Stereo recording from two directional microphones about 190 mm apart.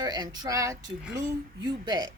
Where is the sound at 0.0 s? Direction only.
20° right (ahead or behind).